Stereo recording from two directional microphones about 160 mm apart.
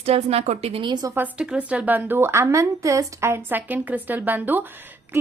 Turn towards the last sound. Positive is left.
turn(degrees=-10)  # may be behind; listen again after turning